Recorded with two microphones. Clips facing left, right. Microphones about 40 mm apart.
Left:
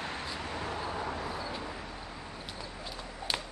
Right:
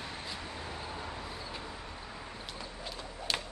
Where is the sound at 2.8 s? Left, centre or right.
Centre.